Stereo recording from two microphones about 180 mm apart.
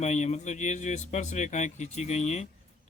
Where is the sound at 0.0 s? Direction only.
40° left (ahead or behind).